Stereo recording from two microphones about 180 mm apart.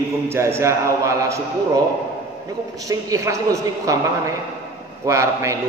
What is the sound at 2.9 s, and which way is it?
A man's voice, 15° right (ahead or behind).